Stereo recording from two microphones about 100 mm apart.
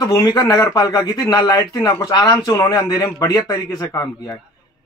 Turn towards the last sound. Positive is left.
turn(degrees=30)  # may be behind; listen again after turning